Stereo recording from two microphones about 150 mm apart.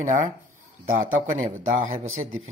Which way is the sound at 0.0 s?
60° right (ahead or behind).